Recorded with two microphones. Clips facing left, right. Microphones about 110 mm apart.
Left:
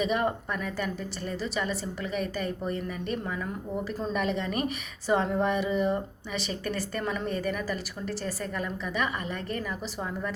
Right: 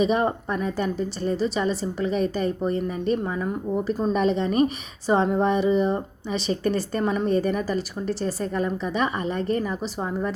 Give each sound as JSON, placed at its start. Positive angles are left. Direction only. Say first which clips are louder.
{"t": 0.0, "sound": "a woman's voice", "louder": "right 5 dB", "side_deg": -25}